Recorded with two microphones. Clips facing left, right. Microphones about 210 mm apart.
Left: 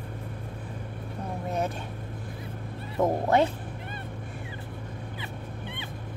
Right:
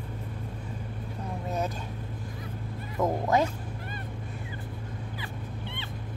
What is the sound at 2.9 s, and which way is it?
Cat, 30° left (ahead or behind).